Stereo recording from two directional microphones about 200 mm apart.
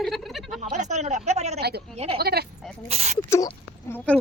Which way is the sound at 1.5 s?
55° right (ahead or behind).